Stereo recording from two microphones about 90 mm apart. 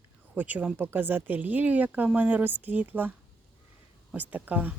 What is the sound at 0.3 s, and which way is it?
Speech, 15° right (ahead or behind).